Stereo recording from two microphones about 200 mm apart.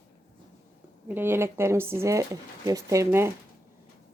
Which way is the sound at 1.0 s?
10° right (ahead or behind).